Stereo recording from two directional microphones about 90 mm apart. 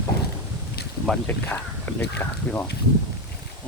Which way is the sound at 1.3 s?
20° left (ahead or behind).